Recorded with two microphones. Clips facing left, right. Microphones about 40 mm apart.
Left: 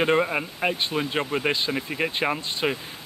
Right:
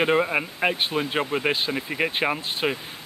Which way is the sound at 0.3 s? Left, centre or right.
Centre.